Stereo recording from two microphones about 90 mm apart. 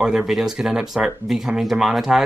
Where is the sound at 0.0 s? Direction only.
5° right (ahead or behind).